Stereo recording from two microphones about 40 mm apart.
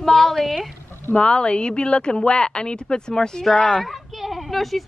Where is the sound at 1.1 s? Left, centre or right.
Left.